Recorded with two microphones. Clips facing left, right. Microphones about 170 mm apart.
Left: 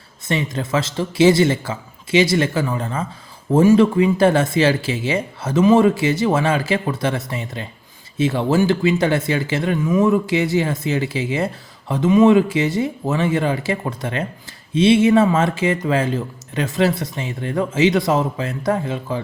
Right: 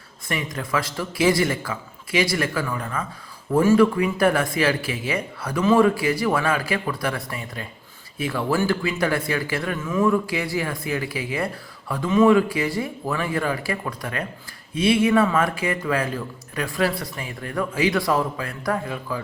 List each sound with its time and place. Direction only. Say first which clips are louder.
0.3 s speech: left 5 dB; 25° left (ahead or behind)